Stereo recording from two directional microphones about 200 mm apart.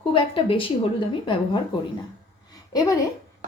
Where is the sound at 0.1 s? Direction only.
25° left (ahead or behind).